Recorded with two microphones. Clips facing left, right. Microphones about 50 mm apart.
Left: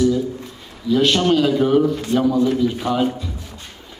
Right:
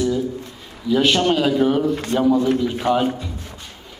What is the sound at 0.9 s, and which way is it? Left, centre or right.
Speech, centre.